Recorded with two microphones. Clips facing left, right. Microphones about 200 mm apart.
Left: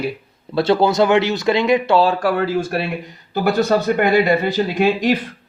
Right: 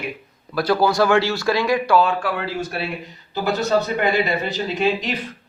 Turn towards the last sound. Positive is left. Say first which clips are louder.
# left 5 dB
turn(degrees=50)  # may be behind; listen again after turning